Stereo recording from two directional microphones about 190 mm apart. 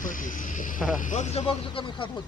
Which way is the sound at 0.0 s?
45° left (ahead or behind).